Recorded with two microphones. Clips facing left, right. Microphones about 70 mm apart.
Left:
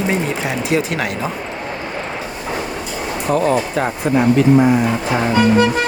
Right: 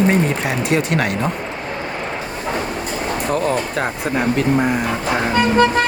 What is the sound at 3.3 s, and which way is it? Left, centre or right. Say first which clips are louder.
Speech: left 5 dB; centre.